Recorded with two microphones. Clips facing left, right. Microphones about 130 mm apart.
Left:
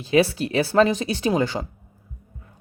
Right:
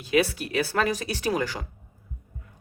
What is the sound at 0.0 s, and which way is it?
Speech, 30° left (ahead or behind).